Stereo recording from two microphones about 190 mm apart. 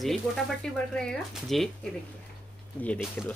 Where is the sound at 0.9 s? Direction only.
Centre (ahead or behind).